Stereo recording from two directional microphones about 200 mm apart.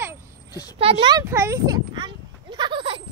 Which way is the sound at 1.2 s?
15° right (ahead or behind).